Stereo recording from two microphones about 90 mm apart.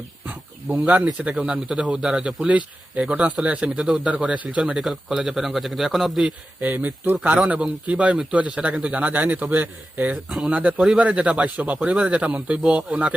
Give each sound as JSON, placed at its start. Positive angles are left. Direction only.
{"t": 0.3, "sound": "a man's voice", "side_deg": -15}
{"t": 6.2, "sound": "a man's voice", "side_deg": -20}